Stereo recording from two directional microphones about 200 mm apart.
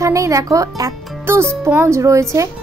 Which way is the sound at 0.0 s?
15° right (ahead or behind).